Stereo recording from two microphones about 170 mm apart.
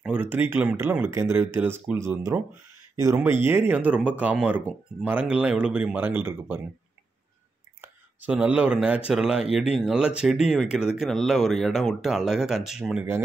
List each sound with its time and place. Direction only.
0.0 s speech: 10° right (ahead or behind)
7.8 s speech: 10° right (ahead or behind)